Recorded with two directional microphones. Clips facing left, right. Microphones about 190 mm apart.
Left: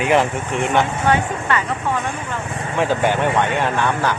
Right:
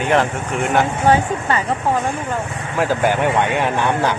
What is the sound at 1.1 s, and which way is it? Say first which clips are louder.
Speech: right 4 dB; 35° right (ahead or behind).